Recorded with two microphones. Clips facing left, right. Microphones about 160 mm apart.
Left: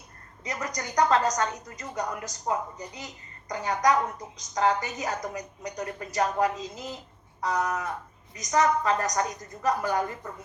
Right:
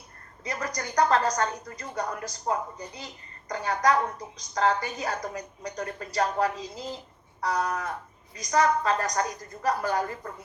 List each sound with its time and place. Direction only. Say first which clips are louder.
0.4 s a woman's voice: right 1 dB; 20° left (ahead or behind)